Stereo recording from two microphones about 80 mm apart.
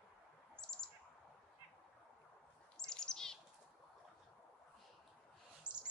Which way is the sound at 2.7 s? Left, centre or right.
Centre.